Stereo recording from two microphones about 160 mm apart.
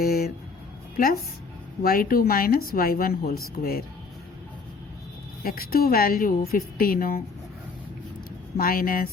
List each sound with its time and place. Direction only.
0.0 s music: 70° left (ahead or behind)
1.8 s speech: 65° left (ahead or behind)
5.4 s speech: 70° left (ahead or behind)
8.5 s speech: 65° left (ahead or behind)